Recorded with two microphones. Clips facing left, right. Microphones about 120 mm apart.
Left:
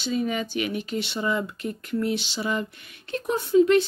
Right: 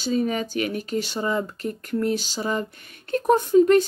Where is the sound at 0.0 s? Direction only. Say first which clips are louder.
Right 3 dB; 40° right (ahead or behind).